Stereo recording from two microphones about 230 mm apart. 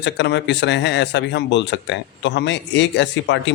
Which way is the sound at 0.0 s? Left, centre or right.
Left.